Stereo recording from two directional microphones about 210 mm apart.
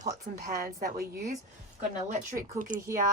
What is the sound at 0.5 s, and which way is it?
Speech, 45° right (ahead or behind).